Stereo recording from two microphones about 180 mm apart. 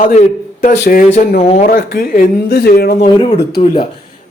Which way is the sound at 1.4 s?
40° left (ahead or behind).